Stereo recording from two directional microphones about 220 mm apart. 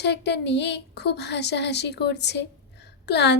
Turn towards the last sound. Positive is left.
turn(degrees=50)  # may be behind; listen again after turning